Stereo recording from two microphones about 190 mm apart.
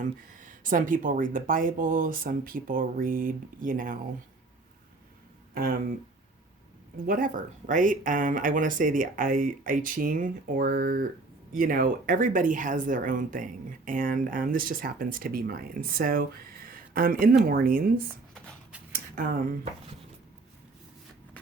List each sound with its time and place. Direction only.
0.0 s speech: 45° right (ahead or behind)
5.5 s speech: 50° right (ahead or behind)
6.9 s speech: 45° right (ahead or behind)
16.6 s a sound: 50° right (ahead or behind)
17.4 s speech: 50° right (ahead or behind)
18.9 s speech: 50° right (ahead or behind)